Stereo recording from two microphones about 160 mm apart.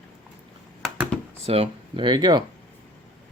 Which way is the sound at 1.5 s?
35° right (ahead or behind).